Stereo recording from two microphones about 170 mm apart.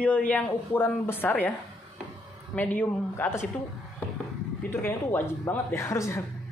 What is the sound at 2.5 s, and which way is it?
A woman's voice, 10° left (ahead or behind).